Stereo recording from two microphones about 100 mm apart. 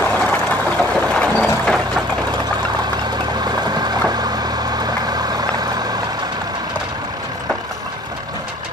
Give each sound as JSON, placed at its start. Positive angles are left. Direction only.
{"t": 0.0, "sound": "vehicle", "side_deg": 15}
{"t": 3.3, "sound": "vehicle", "side_deg": -45}